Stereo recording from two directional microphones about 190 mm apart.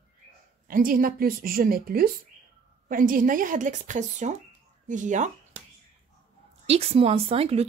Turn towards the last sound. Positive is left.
turn(degrees=-30)  # may be behind; listen again after turning